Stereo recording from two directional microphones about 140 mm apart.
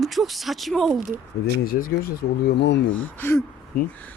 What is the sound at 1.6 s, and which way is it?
Speech, 85° left.